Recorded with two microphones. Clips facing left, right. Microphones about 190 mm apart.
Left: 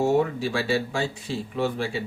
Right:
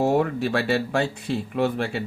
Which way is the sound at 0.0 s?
60° right (ahead or behind).